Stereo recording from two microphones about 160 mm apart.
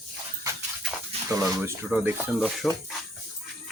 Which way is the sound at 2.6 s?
Centre (ahead or behind).